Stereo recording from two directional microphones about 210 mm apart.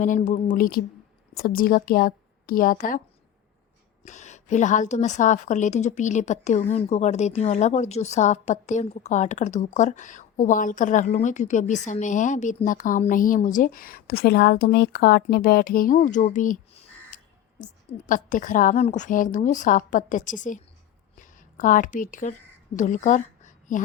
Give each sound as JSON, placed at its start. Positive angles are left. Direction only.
{"t": 0.0, "sound": "a woman's voice", "side_deg": 35}
{"t": 4.0, "sound": "a woman's voice", "side_deg": 35}
{"t": 17.1, "sound": "crow", "side_deg": 40}
{"t": 17.6, "sound": "a woman's voice", "side_deg": 40}
{"t": 21.2, "sound": "a sound", "side_deg": 40}